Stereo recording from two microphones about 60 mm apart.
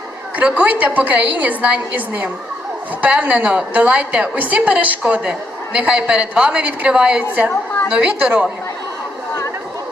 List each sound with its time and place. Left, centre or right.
0.4 s a woman's voice: centre